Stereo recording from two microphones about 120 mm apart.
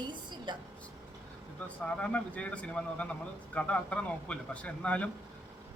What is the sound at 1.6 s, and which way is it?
A man's voice, 10° left (ahead or behind).